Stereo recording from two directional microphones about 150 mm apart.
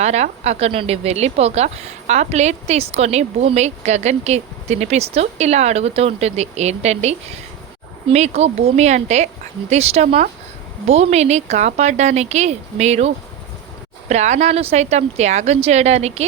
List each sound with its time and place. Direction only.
0.0 s speech: 45° right (ahead or behind)